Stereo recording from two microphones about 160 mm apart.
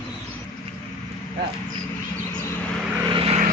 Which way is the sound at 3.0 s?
35° right (ahead or behind).